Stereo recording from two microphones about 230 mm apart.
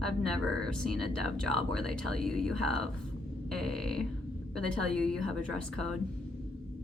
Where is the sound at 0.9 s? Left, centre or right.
Right.